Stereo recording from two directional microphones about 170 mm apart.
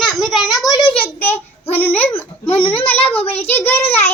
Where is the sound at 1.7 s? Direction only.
10° left (ahead or behind).